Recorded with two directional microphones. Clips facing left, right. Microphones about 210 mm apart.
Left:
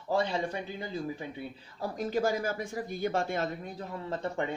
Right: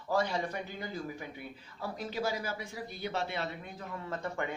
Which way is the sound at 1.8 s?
45° left (ahead or behind).